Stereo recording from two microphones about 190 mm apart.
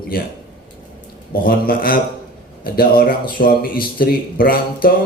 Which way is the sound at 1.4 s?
50° left (ahead or behind).